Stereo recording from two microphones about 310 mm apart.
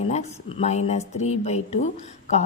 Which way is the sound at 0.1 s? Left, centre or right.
Centre.